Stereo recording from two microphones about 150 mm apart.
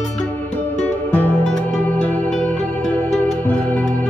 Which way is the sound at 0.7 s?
10° left (ahead or behind).